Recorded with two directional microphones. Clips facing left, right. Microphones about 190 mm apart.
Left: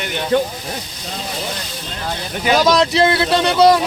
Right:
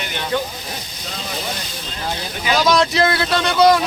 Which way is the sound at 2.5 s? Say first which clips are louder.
Left 2 dB; 45° left (ahead or behind).